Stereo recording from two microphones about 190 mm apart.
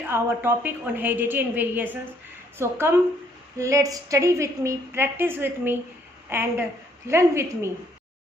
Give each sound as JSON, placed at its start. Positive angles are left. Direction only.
{"t": 0.1, "sound": "a woman's voice", "side_deg": -10}